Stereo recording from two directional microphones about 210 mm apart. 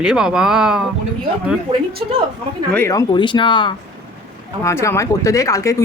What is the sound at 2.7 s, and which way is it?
Speech, 10° left (ahead or behind).